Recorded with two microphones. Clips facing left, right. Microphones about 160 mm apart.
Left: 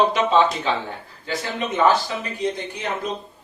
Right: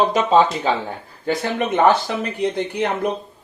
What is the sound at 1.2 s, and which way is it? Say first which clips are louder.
A man's voice: right 6 dB; 55° right (ahead or behind).